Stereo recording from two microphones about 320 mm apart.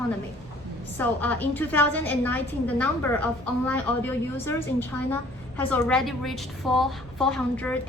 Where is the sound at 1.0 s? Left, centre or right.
Centre.